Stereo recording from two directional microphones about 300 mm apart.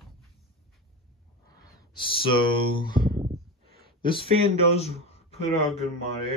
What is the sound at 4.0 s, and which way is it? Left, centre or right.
Speech, centre.